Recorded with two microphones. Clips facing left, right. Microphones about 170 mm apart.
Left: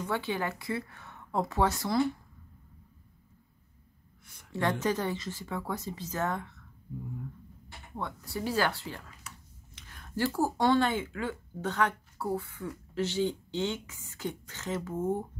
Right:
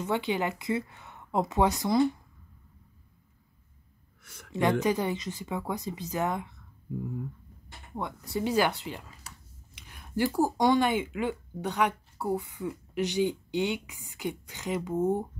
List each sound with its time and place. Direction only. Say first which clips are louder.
0.0 s speech: right 3 dB; 20° right (ahead or behind)
4.2 s a sound: right 7 dB; 85° right
4.5 s speech: right 4 dB; 15° right (ahead or behind)
7.9 s speech: right 4 dB; 20° right (ahead or behind)
9.3 s a sound: left 1 dB; 35° right (ahead or behind)
9.8 s speech: right 3 dB; 15° right (ahead or behind)